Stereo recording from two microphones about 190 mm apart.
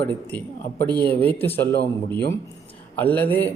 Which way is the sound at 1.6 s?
25° right (ahead or behind).